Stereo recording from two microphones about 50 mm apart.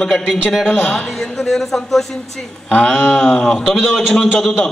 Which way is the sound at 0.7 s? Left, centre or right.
Left.